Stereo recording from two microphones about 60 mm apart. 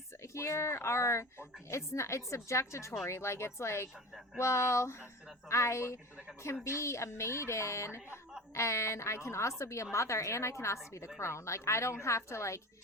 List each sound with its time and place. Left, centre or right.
0.2 s speech: left